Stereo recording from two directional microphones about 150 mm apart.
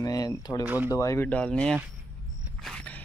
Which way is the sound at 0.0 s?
25° left (ahead or behind).